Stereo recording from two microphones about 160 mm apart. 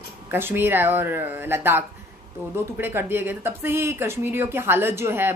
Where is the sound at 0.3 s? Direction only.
15° right (ahead or behind).